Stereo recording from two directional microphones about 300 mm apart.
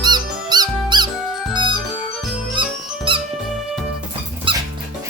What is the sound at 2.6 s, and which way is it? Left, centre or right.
Music, centre.